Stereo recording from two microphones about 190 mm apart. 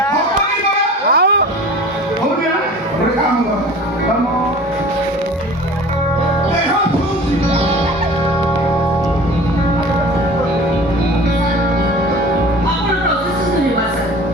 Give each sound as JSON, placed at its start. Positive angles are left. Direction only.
{"t": 1.1, "sound": "music", "side_deg": -60}